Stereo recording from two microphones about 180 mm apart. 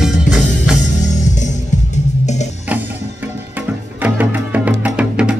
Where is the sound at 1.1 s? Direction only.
40° left (ahead or behind).